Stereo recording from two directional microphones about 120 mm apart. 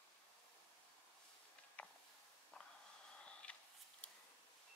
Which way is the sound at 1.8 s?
10° left (ahead or behind).